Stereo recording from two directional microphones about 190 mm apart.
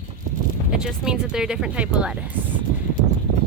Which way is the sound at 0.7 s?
5° right (ahead or behind).